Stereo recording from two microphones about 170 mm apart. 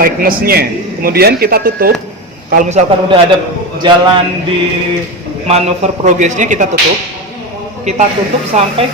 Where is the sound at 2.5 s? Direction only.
45° right (ahead or behind).